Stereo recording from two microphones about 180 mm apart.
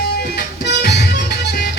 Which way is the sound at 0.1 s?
65° left (ahead or behind).